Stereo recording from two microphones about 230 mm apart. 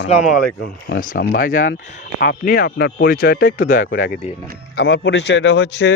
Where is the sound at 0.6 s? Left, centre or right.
Left.